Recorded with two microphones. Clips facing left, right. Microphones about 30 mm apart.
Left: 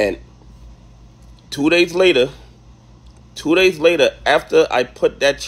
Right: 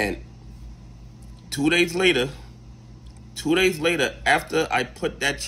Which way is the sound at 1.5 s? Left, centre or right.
Left.